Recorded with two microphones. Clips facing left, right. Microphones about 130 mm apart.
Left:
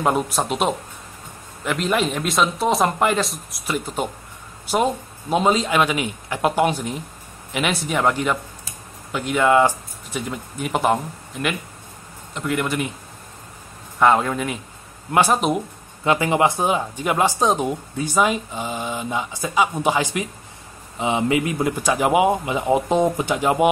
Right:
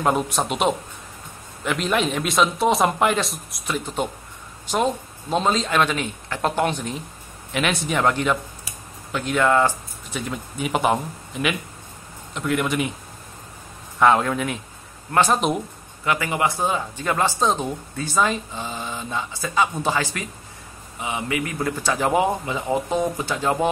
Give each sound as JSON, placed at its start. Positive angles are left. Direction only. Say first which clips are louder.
{"t": 0.0, "sound": "a man's voice", "louder": "left 1 dB", "side_deg": 0}
{"t": 10.2, "sound": "a man's voice", "louder": "right 3 dB", "side_deg": 0}
{"t": 13.9, "sound": "a man's voice", "louder": "even", "side_deg": 0}
{"t": 16.0, "sound": "speech", "louder": "left 4 dB", "side_deg": 25}